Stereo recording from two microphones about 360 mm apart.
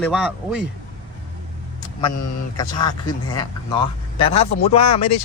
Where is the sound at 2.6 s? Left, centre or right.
Centre.